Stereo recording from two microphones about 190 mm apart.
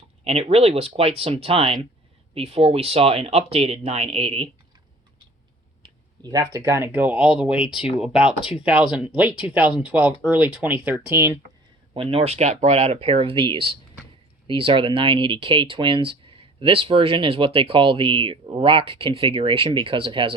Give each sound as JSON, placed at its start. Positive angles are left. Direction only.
{"t": 0.3, "sound": "speech", "side_deg": -30}
{"t": 5.8, "sound": "speech", "side_deg": -20}
{"t": 11.9, "sound": "speech", "side_deg": -30}